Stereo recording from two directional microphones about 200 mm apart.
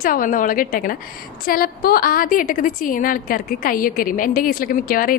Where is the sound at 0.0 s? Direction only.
45° left (ahead or behind).